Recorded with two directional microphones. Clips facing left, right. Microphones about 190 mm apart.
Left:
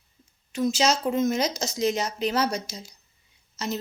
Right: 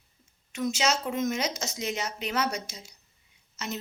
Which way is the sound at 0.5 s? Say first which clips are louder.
Left 4 dB; 35° left (ahead or behind).